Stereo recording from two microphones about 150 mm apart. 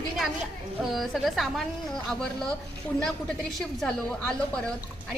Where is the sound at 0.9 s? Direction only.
Centre (ahead or behind).